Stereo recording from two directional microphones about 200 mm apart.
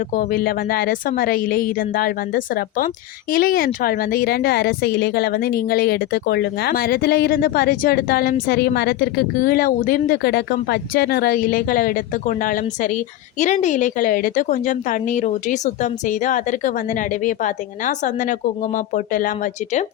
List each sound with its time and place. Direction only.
0.1 s a woman's voice: 45° left (ahead or behind)